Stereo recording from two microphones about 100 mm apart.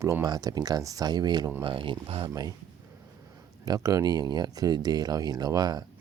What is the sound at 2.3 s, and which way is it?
Speech, 35° right (ahead or behind).